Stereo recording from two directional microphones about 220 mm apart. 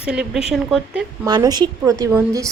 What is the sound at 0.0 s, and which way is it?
Speech, 5° right (ahead or behind).